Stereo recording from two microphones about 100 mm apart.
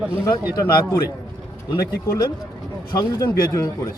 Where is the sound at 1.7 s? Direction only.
45° left (ahead or behind).